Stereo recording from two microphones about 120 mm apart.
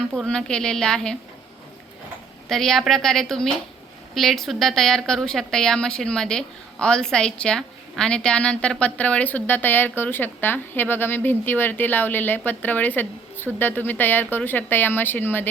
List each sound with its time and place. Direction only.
0.1 s a woman's voice: 5° left (ahead or behind)
2.5 s a woman's voice: 5° left (ahead or behind)